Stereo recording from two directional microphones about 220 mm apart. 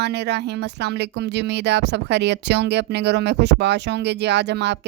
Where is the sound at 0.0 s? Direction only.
50° right (ahead or behind).